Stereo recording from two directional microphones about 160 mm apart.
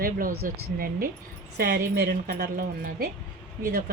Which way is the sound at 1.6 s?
80° right.